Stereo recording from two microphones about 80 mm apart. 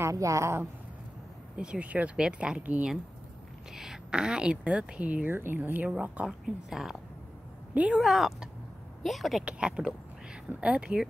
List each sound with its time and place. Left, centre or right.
0.0 s a woman's voice: right
1.6 s a woman's voice: centre
6.4 s speech: centre
7.7 s speech: centre
8.0 s speech: centre
9.4 s a woman's voice: centre